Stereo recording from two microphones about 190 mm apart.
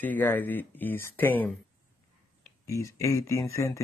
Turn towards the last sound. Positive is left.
turn(degrees=15)  # may be behind; listen again after turning